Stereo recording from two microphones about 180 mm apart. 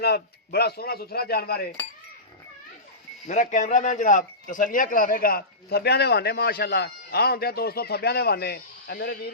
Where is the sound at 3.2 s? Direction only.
45° left (ahead or behind).